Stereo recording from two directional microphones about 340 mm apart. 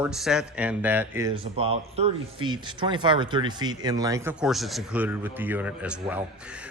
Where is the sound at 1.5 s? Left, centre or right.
Centre.